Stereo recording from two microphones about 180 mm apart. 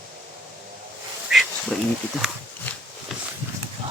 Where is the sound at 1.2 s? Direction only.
Centre (ahead or behind).